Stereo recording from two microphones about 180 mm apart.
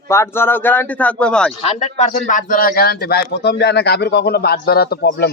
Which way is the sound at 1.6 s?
35° left (ahead or behind).